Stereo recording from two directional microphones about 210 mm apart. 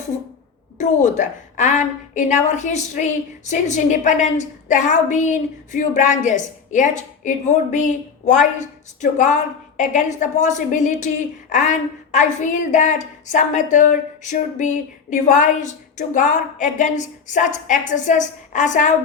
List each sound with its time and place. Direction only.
0.8 s a woman's voice: 35° left (ahead or behind)